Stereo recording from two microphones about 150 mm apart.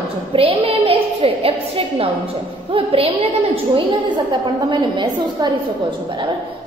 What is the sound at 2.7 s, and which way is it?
A woman's voice, 40° right (ahead or behind).